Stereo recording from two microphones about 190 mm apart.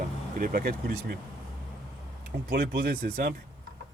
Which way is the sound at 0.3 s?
50° right (ahead or behind).